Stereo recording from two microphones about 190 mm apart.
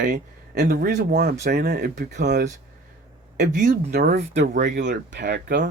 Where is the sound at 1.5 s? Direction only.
55° right (ahead or behind).